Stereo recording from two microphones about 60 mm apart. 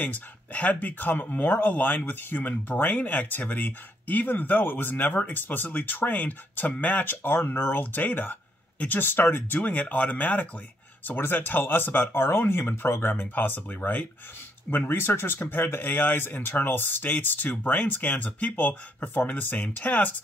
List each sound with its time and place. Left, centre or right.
0.0 s speech: left
9.6 s speech: left